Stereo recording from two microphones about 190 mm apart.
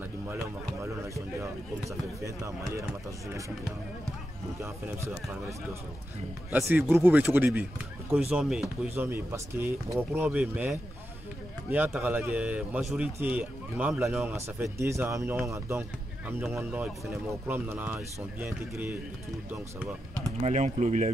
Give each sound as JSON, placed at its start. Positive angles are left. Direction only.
{"t": 1.0, "sound": "a man's voice", "side_deg": -15}
{"t": 4.6, "sound": "a man's voice", "side_deg": -10}
{"t": 6.5, "sound": "a man's voice", "side_deg": -10}
{"t": 20.4, "sound": "speech", "side_deg": -40}